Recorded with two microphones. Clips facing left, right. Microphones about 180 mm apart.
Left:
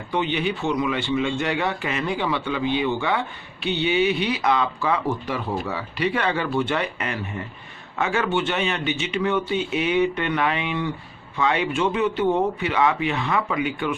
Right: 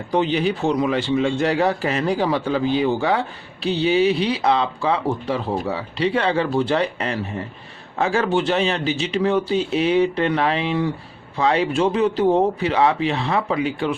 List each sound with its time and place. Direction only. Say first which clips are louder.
0.1 s a man's voice: right 4 dB; 35° right (ahead or behind)